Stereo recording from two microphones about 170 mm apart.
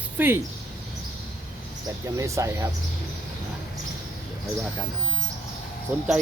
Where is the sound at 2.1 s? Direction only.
20° right (ahead or behind).